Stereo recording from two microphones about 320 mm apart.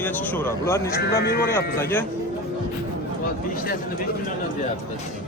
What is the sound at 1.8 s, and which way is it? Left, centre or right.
Speech, centre.